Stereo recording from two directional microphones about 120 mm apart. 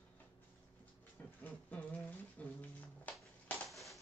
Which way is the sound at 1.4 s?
15° left (ahead or behind).